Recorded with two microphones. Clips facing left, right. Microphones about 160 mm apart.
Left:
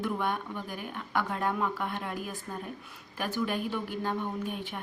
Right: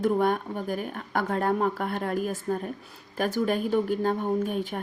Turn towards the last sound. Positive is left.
turn(degrees=-45)  # may be behind; listen again after turning